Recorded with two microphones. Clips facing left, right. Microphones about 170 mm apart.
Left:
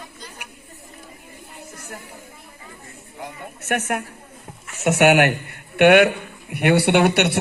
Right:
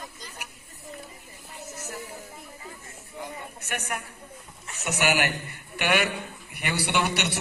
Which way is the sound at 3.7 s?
55° left (ahead or behind).